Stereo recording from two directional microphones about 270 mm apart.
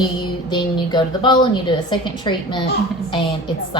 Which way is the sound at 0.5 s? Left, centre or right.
Centre.